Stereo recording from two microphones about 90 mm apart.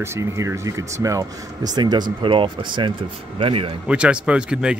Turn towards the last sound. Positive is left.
turn(degrees=-10)  # may be behind; listen again after turning